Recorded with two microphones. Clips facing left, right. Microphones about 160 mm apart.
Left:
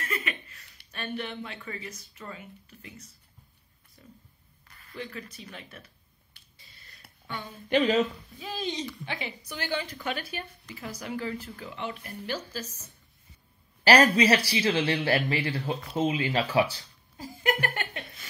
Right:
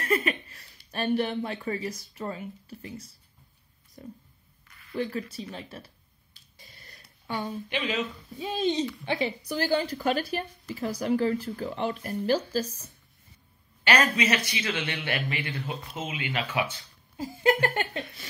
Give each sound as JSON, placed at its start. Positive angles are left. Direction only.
{"t": 0.0, "sound": "a sound", "side_deg": -40}
{"t": 0.9, "sound": "a woman's voice", "side_deg": -35}
{"t": 4.0, "sound": "speech", "side_deg": -50}
{"t": 4.9, "sound": "a woman's voice", "side_deg": -35}
{"t": 6.6, "sound": "a sound", "side_deg": -40}
{"t": 7.7, "sound": "speech", "side_deg": 40}
{"t": 8.4, "sound": "a woman's voice", "side_deg": -25}
{"t": 13.8, "sound": "speech", "side_deg": 35}
{"t": 17.2, "sound": "speech", "side_deg": -25}